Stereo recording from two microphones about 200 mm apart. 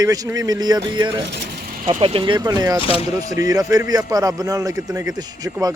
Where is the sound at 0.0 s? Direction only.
15° right (ahead or behind).